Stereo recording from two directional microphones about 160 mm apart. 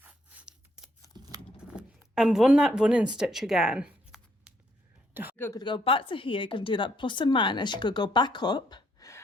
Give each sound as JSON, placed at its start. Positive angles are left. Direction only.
{"t": 0.0, "sound": "scissors", "side_deg": -10}
{"t": 1.1, "sound": "scissors", "side_deg": -25}
{"t": 1.5, "sound": "a sound", "side_deg": -5}
{"t": 5.4, "sound": "speech", "side_deg": 20}
{"t": 5.6, "sound": "a woman's voice", "side_deg": 35}